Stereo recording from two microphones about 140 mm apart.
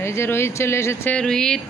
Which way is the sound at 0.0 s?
20° left (ahead or behind).